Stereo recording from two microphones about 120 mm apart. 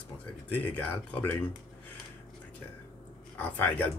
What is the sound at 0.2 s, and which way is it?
Speech, 15° left (ahead or behind).